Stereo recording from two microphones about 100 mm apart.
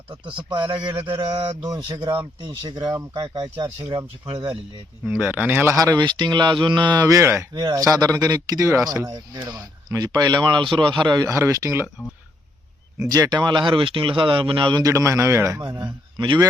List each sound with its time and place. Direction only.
0.5 s speech: 50° right (ahead or behind)
1.6 s speech: 35° right (ahead or behind)
2.0 s speech: 50° right (ahead or behind)
2.7 s speech: 35° right (ahead or behind)
3.8 s speech: 50° right (ahead or behind)
5.0 s speech: 15° right (ahead or behind)
5.7 s speech: 35° right (ahead or behind)
7.0 s speech: 30° right (ahead or behind); by 11.3 s 50° right (ahead or behind)
11.3 s speech: 30° right (ahead or behind)
13.0 s speech: 35° right (ahead or behind); by 14.7 s 60° right (ahead or behind)
14.7 s speech: 35° right (ahead or behind)
15.8 s a man's voice: 45° right (ahead or behind)